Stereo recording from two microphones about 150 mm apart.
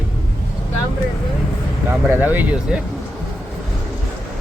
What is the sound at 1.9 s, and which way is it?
Speech, 15° right (ahead or behind).